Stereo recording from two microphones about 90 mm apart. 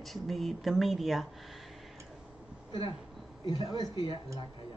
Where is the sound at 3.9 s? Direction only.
60° left (ahead or behind).